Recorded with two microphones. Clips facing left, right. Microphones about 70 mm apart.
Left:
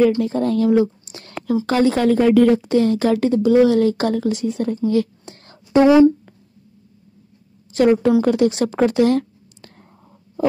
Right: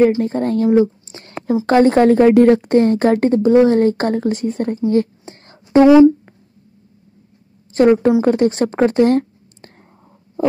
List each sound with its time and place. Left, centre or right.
0.2 s speech: right
1.0 s a sound: right
1.7 s speech: right
2.3 s speech: right
5.2 s a sound: right
7.7 s a woman's voice: right